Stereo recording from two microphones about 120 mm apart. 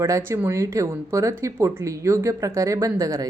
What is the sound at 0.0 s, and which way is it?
A woman's voice, 20° right (ahead or behind).